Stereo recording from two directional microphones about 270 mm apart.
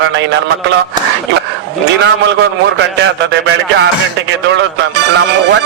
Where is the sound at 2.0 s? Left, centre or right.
Right.